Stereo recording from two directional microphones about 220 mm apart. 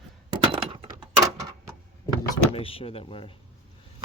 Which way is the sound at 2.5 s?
25° left (ahead or behind).